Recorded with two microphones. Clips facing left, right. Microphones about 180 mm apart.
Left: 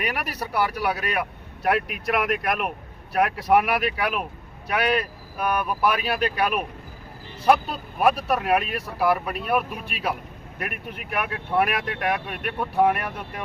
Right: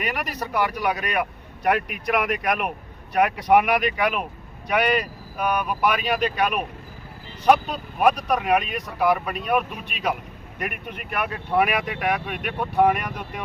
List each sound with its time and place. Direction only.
0.0 s speech: 10° left (ahead or behind)
5.4 s speech: 5° left (ahead or behind)